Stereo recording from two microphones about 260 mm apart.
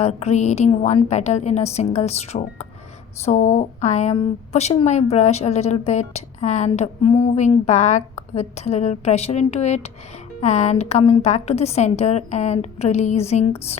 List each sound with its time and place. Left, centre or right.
0.0 s a woman's voice: left